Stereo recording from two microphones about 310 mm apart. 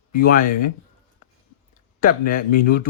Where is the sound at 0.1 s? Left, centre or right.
Left.